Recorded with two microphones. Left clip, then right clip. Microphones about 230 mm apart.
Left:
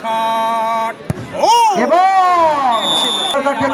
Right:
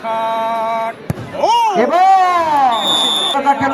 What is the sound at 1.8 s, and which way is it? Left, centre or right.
Speech, centre.